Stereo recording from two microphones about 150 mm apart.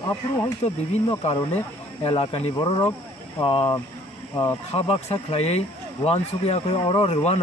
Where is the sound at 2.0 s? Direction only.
40° left (ahead or behind).